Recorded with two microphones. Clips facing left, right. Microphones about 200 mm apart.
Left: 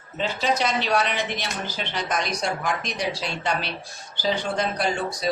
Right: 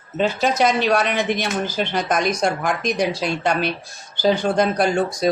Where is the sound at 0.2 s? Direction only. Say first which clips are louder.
Right 6 dB; 50° right (ahead or behind).